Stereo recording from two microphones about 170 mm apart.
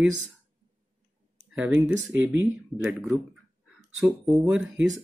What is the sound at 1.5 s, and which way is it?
Speech, 10° right (ahead or behind).